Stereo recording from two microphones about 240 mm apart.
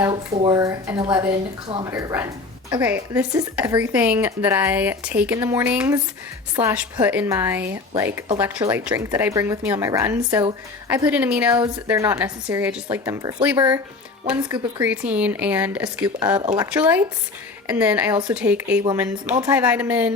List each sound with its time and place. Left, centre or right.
0.3 s speech: centre
1.9 s a woman's voice: centre